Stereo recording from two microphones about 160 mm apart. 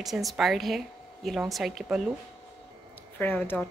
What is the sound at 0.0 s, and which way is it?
A woman's voice, centre (ahead or behind).